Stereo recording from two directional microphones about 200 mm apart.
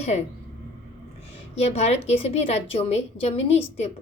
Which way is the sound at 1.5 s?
35° left (ahead or behind).